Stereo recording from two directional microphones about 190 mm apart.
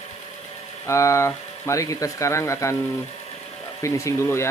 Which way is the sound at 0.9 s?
15° left (ahead or behind).